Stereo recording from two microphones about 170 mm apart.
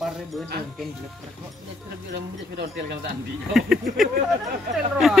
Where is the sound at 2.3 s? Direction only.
80° right.